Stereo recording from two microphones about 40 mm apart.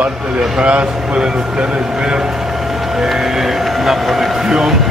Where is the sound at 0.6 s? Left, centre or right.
Right.